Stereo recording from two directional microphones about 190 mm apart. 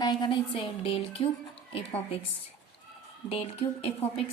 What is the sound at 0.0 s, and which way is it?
A woman's voice, 20° left (ahead or behind).